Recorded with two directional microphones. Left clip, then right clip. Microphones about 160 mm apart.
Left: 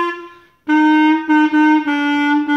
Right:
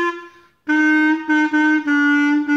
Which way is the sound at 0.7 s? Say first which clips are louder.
Left 3 dB; 35° right (ahead or behind).